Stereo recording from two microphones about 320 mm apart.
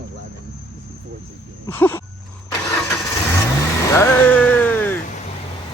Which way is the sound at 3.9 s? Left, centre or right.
Centre.